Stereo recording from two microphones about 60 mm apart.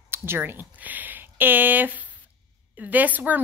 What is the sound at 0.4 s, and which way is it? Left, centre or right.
Speech, right.